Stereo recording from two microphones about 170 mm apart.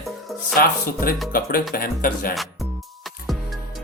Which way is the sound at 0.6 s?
60° left (ahead or behind).